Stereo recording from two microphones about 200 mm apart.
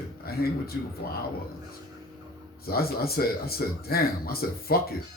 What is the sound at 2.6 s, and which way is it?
A man's voice, 50° left (ahead or behind).